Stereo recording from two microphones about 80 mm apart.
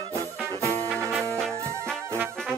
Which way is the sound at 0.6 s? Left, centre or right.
Right.